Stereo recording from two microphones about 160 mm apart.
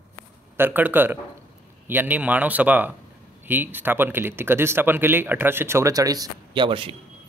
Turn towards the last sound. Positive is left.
turn(degrees=-35)  # may be behind; listen again after turning